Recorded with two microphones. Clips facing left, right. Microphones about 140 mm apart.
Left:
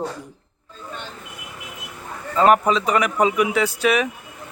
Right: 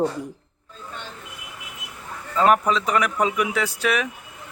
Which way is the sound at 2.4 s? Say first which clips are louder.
Left 3 dB; 5° left (ahead or behind).